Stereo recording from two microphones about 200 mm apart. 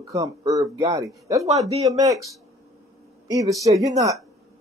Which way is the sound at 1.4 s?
30° right (ahead or behind).